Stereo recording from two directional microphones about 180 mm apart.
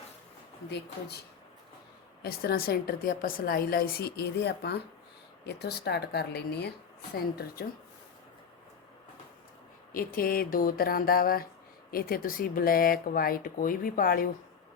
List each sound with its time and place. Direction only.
0.7 s a woman's voice: 65° left (ahead or behind)
2.2 s a woman's voice: 60° left (ahead or behind)
9.9 s speech: 55° left (ahead or behind)